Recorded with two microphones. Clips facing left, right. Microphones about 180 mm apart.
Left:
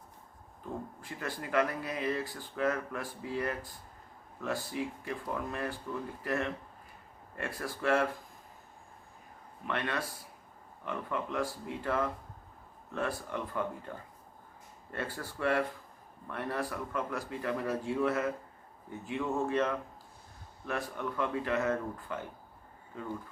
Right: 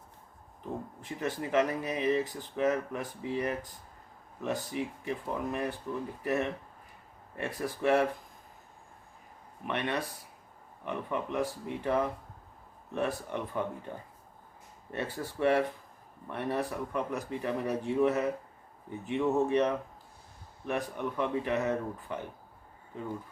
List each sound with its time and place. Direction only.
1.0 s speech: 20° right (ahead or behind)
9.6 s speech: 20° right (ahead or behind)